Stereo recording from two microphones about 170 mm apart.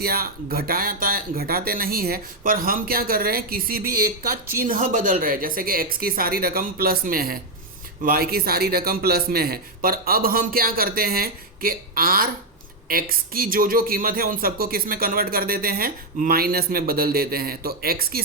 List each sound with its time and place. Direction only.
0.0 s speech: 60° right (ahead or behind)